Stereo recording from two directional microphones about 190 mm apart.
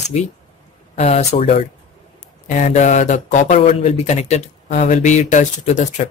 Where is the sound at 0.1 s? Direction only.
40° left (ahead or behind).